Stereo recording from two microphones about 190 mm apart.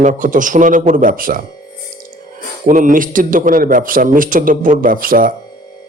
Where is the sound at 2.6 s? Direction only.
45° right (ahead or behind).